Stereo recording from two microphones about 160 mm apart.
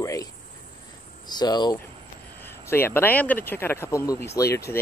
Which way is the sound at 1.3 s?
25° left (ahead or behind).